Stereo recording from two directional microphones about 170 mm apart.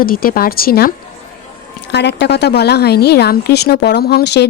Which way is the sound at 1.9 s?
85° left.